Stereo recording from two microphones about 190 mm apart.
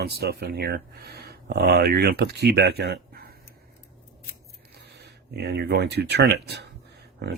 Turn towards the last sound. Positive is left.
turn(degrees=-60)  # may be behind; listen again after turning